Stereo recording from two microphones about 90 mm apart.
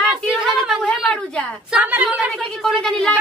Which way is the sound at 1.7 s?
15° right (ahead or behind).